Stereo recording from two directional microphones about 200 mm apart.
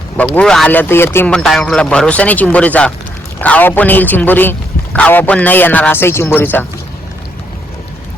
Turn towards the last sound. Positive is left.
turn(degrees=10)  # may be behind; listen again after turning